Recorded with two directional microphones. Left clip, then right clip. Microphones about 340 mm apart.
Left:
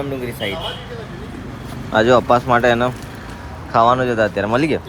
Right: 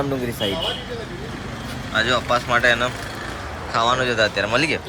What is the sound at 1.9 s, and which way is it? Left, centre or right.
Speech, centre.